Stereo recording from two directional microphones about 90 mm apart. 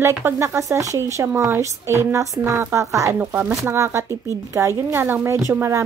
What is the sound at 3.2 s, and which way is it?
A woman's voice, 25° right (ahead or behind).